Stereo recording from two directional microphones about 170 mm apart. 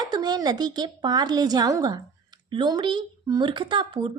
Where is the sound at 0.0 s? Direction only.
25° right (ahead or behind).